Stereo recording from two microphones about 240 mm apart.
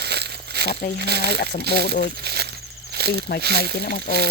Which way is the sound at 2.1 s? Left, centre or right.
Right.